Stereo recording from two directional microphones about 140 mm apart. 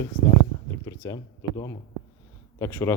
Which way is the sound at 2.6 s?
20° left (ahead or behind).